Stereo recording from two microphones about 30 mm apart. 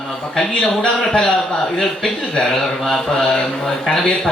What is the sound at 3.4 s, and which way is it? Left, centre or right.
Speech, centre.